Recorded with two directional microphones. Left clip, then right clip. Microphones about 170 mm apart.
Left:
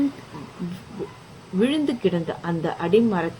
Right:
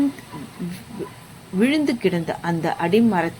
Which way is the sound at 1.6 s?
35° right (ahead or behind).